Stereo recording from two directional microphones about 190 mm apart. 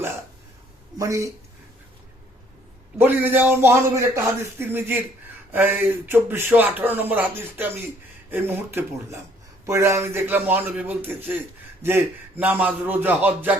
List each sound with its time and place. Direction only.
0.9 s speech: 15° right (ahead or behind)
3.0 s speech: 10° right (ahead or behind)